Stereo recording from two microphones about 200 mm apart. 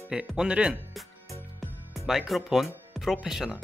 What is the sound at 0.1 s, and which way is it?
Speech, 5° right (ahead or behind).